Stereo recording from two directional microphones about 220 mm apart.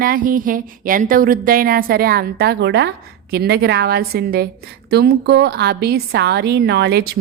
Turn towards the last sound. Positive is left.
turn(degrees=-50)  # may be behind; listen again after turning